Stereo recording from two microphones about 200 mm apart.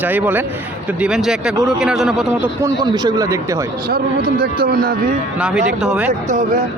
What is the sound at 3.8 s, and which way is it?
Speech, 50° right (ahead or behind).